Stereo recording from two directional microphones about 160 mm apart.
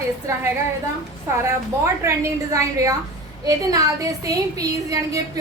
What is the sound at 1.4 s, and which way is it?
A woman's voice, 20° right (ahead or behind).